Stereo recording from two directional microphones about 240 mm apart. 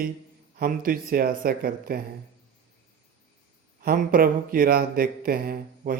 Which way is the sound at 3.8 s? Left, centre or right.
Right.